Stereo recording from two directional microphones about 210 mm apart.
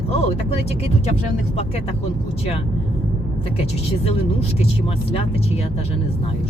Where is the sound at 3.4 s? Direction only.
30° left (ahead or behind).